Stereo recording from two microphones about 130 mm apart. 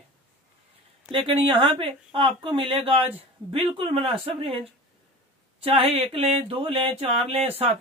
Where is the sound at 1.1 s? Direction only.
40° right (ahead or behind).